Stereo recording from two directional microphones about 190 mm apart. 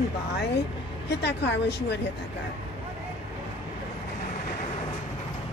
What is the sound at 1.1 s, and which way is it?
Speech, 65° left (ahead or behind).